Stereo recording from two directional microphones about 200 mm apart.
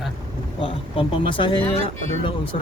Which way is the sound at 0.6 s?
25° left (ahead or behind).